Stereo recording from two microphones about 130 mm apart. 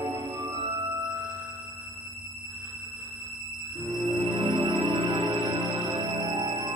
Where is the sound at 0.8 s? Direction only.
15° right (ahead or behind).